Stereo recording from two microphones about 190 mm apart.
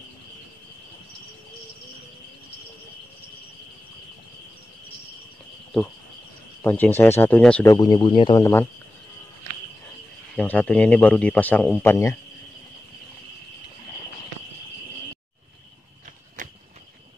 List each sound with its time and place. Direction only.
6.6 s speech: 10° left (ahead or behind)
7.6 s speech: 20° left (ahead or behind)
10.3 s a man's voice: 5° left (ahead or behind)